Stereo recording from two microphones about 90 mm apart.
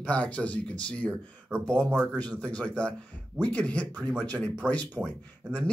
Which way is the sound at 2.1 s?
15° left (ahead or behind).